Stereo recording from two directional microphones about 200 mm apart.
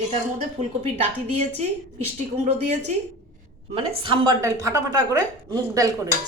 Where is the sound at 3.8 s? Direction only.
25° right (ahead or behind).